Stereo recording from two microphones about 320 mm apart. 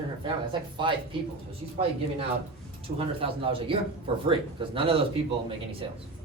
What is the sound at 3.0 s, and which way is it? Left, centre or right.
Speech, centre.